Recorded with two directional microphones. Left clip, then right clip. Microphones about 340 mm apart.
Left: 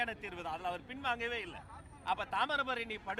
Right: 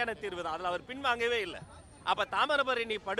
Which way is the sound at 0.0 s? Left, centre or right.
Centre.